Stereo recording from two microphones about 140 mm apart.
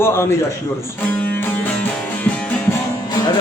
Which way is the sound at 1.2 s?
15° left (ahead or behind).